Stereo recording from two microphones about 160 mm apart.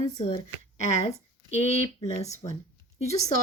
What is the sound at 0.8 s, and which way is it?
Speech, 45° left (ahead or behind).